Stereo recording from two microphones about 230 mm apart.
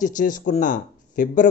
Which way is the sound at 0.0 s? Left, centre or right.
Left.